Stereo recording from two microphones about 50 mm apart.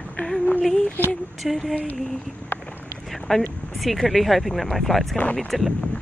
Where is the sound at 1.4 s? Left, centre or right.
Centre.